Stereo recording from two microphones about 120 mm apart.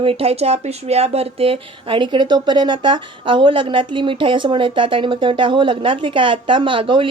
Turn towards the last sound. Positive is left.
turn(degrees=-45)  # may be behind; listen again after turning